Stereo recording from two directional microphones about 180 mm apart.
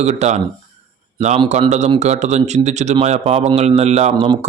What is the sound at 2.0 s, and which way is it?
A man's voice, 40° right (ahead or behind).